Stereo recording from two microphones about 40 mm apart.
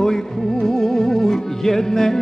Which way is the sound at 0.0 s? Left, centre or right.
Centre.